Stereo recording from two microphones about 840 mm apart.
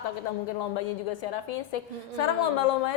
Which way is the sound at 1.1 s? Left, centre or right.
Left.